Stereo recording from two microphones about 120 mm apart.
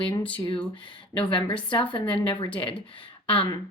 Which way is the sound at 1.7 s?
40° left (ahead or behind).